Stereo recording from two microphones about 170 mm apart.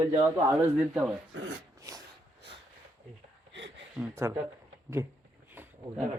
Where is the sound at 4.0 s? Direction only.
15° right (ahead or behind).